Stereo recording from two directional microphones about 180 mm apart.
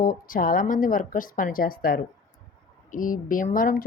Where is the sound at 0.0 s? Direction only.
50° left (ahead or behind).